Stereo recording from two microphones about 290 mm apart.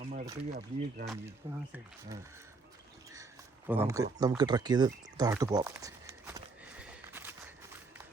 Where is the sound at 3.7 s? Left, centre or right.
Centre.